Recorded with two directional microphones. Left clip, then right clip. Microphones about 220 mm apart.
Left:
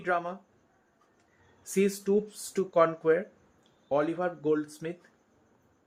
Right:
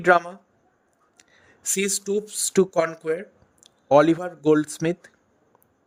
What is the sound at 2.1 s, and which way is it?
A woman's voice, 50° right (ahead or behind).